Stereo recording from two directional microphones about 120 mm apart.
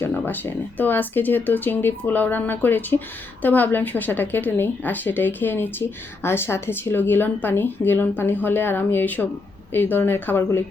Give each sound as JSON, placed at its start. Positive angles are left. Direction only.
{"t": 0.0, "sound": "speech", "side_deg": 15}